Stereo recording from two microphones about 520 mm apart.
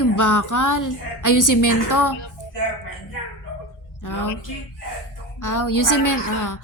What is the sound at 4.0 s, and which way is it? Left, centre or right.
Speech, left.